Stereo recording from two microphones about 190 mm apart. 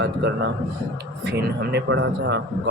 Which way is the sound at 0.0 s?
65° right (ahead or behind).